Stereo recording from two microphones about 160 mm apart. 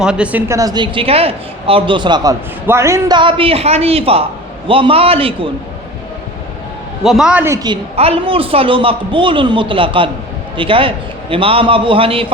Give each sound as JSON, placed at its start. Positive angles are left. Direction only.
{"t": 0.0, "sound": "speech", "side_deg": -5}
{"t": 2.6, "sound": "a man's voice", "side_deg": -15}
{"t": 3.2, "sound": "a man's voice", "side_deg": -30}
{"t": 7.0, "sound": "a man's voice", "side_deg": 0}
{"t": 7.6, "sound": "a man's voice", "side_deg": -35}